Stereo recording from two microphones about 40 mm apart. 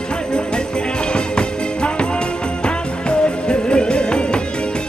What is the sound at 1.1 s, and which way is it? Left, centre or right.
Music, left.